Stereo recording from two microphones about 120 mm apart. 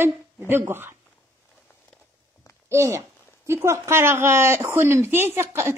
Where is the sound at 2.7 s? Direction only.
25° right (ahead or behind).